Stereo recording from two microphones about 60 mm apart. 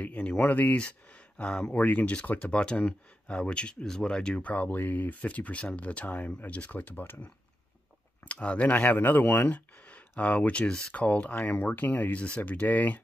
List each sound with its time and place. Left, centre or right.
0.0 s speech: centre
1.7 s speech: left
2.6 s speech: centre; by 7.2 s left
8.3 s speech: left